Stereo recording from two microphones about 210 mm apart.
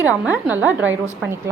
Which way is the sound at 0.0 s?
5° right (ahead or behind).